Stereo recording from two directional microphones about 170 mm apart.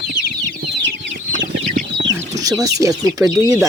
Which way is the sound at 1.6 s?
70° right (ahead or behind).